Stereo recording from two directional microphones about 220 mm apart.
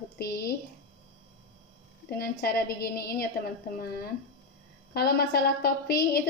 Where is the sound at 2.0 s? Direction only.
45° left (ahead or behind).